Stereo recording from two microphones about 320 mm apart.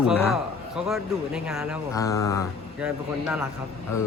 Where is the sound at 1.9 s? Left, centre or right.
Centre.